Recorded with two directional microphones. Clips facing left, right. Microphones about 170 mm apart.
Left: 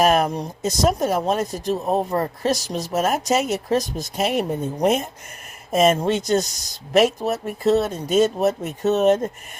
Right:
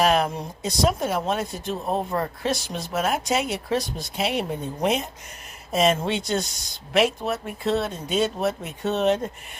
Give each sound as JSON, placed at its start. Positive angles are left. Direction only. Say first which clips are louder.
{"t": 0.0, "sound": "speech", "louder": "left 3 dB", "side_deg": 45}